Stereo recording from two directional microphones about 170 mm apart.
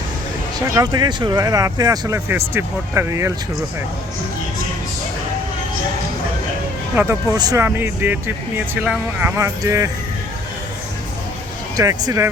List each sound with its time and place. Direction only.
0.7 s speech: 20° right (ahead or behind)
6.9 s speech: 15° right (ahead or behind)
11.8 s speech: 20° right (ahead or behind)